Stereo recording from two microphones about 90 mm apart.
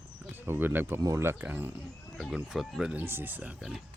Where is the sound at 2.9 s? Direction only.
20° right (ahead or behind).